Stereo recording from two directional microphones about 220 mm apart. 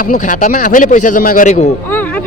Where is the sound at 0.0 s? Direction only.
35° left (ahead or behind).